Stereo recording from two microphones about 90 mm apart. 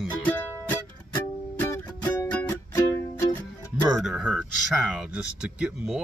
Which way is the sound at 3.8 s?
5° right (ahead or behind).